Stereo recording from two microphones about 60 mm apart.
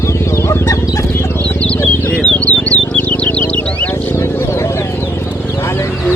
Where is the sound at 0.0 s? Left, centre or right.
Left.